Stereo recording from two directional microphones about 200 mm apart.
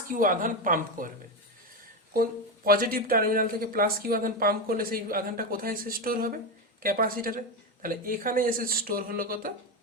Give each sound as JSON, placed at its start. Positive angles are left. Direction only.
{"t": 0.1, "sound": "speech", "side_deg": -40}
{"t": 2.6, "sound": "speech", "side_deg": -45}